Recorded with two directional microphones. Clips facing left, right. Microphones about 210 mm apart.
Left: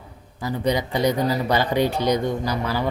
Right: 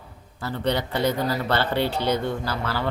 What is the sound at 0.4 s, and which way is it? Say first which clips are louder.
Speech: left 2 dB; 10° left (ahead or behind).